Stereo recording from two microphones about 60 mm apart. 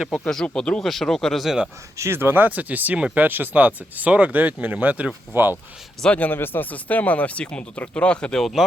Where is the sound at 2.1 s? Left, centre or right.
Right.